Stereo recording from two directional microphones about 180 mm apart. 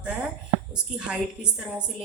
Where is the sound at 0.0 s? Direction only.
5° right (ahead or behind).